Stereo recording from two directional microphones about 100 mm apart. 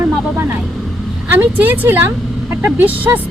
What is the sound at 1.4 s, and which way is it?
Speech, 20° right (ahead or behind).